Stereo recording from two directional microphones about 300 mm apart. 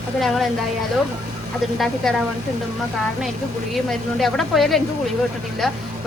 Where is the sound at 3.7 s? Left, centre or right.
Centre.